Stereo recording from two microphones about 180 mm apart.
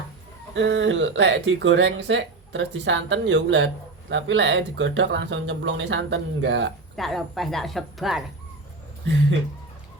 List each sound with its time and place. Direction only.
0.5 s speech: 85° right
6.9 s a woman's voice: centre (ahead or behind)